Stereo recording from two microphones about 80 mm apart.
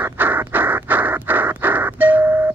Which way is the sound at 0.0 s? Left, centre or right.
Right.